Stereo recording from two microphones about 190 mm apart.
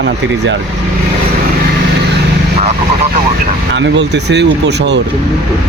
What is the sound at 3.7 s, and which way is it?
Speech, 65° right (ahead or behind).